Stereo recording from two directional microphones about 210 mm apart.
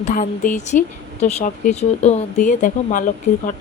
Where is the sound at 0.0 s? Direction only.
40° left (ahead or behind).